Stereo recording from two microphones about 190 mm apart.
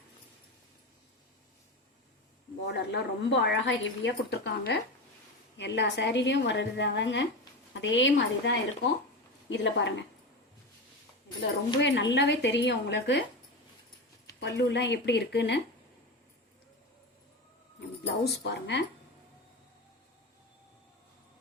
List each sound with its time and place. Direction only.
2.6 s a woman's voice: 65° left (ahead or behind)
11.8 s a woman's voice: 70° left (ahead or behind)
14.3 s a woman's voice: 65° left (ahead or behind)
17.7 s speech: 60° left (ahead or behind)